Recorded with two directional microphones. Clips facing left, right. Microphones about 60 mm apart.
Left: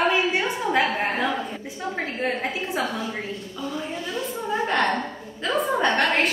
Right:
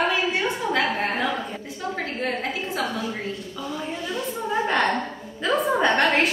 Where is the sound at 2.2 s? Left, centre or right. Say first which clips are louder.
Left 1 dB; left.